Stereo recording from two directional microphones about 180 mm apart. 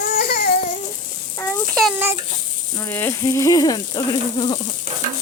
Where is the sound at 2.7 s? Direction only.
15° left (ahead or behind).